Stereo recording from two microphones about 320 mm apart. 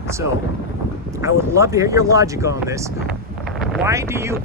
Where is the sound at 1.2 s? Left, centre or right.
Centre.